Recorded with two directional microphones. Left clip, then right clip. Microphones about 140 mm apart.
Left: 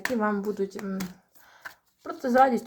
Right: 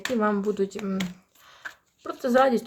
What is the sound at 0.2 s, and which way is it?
Speech, 25° right (ahead or behind).